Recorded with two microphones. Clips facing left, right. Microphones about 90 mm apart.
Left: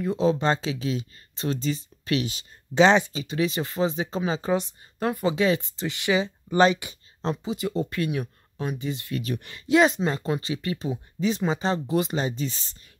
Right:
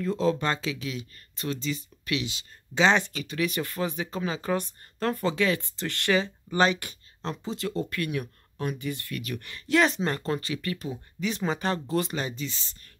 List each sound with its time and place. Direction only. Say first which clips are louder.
0.0 s speech: left 3 dB; 20° left (ahead or behind); by 2.9 s 35° left (ahead or behind)
3.1 s speech: left 3 dB; 25° left (ahead or behind)
6.5 s speech: left 4 dB; 25° left (ahead or behind)
7.4 s speech: left 3 dB; 15° left (ahead or behind); by 12.7 s 35° left (ahead or behind)